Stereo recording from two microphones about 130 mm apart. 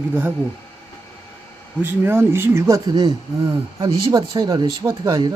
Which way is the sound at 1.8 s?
15° right (ahead or behind).